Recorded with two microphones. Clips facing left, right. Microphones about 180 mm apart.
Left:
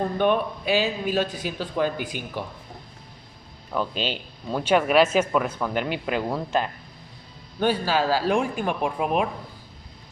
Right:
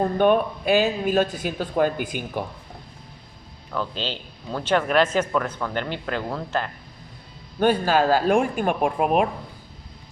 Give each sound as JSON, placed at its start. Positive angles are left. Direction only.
{"t": 0.0, "sound": "speech", "side_deg": -50}
{"t": 3.7, "sound": "speech", "side_deg": 15}
{"t": 7.6, "sound": "speech", "side_deg": -50}